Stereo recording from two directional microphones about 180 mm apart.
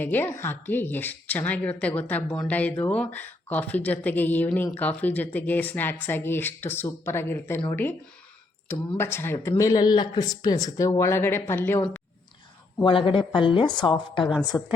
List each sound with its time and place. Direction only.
0.0 s a woman's voice: 10° left (ahead or behind)
8.6 s a woman's voice: 10° left (ahead or behind)
12.8 s a woman's voice: 30° left (ahead or behind)
14.5 s a woman's voice: 10° left (ahead or behind)